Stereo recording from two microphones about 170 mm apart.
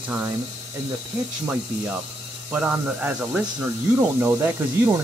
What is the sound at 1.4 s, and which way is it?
Speech, 10° right (ahead or behind).